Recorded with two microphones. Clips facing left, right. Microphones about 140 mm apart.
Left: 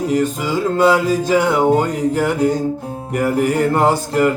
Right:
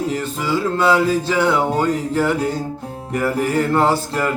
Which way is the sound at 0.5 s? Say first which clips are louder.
Left 2 dB; 15° left (ahead or behind).